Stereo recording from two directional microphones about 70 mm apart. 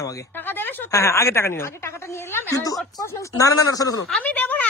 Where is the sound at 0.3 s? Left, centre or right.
Left.